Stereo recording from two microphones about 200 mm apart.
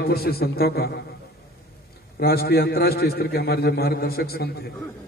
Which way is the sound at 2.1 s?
50° left (ahead or behind).